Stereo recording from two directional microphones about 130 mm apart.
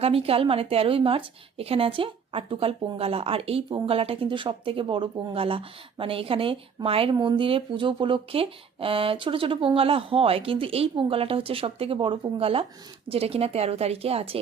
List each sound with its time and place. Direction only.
0.0 s speech: 45° right (ahead or behind)